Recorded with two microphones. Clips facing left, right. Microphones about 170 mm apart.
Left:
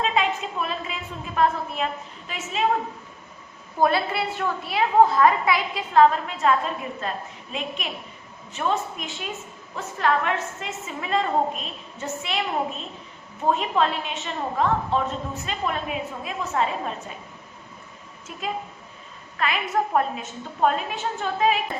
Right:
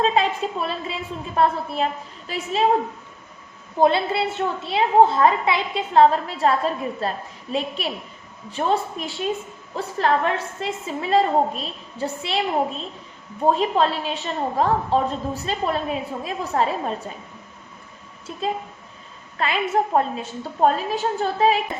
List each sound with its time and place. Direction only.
0.0 s a woman's voice: 35° right (ahead or behind)
3.8 s a woman's voice: 25° right (ahead or behind)
13.4 s a woman's voice: 35° right (ahead or behind)
18.3 s a woman's voice: 30° right (ahead or behind)